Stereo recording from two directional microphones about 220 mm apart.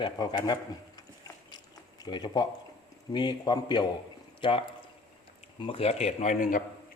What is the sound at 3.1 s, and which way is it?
A man's voice, 20° left (ahead or behind).